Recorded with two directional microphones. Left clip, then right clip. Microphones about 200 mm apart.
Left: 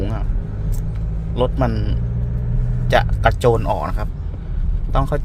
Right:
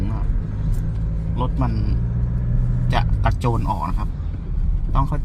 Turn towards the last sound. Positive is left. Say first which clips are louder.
# left 4 dB
turn(degrees=35)  # may be behind; listen again after turning